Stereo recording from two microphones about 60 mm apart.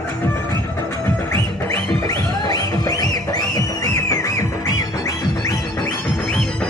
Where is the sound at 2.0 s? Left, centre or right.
Left.